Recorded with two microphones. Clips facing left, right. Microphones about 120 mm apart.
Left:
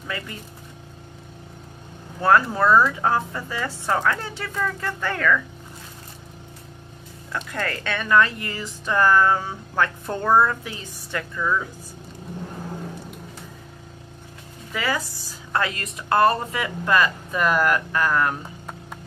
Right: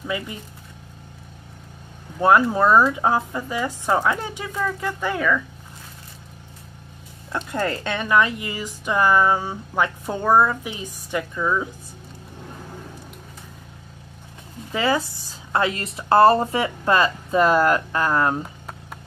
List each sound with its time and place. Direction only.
0.0 s speech: 15° right (ahead or behind)
2.2 s speech: 15° right (ahead or behind)
7.3 s speech: 25° right (ahead or behind)
14.7 s a woman's voice: 25° right (ahead or behind)